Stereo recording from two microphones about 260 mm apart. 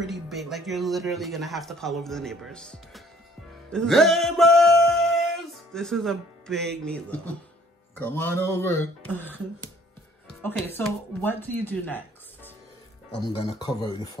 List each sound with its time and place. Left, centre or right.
0.0 s speech: centre
3.7 s music: centre
7.9 s speech: centre
13.3 s speech: left